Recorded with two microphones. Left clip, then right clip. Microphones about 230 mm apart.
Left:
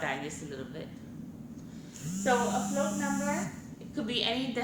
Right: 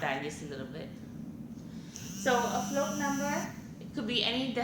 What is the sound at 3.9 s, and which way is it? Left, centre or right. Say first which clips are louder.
Speech: even; centre.